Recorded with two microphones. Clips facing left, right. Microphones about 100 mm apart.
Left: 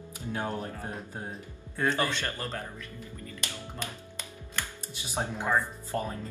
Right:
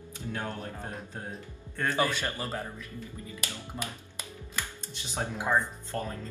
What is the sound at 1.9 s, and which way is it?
Speech, 10° right (ahead or behind).